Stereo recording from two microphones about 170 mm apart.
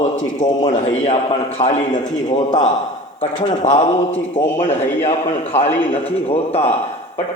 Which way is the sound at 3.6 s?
45° left (ahead or behind).